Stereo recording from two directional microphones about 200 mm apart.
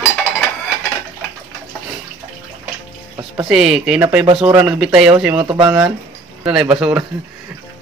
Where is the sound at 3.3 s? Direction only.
5° right (ahead or behind).